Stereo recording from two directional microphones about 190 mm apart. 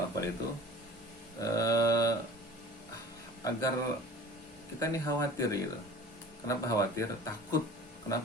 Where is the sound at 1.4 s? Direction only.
15° left (ahead or behind).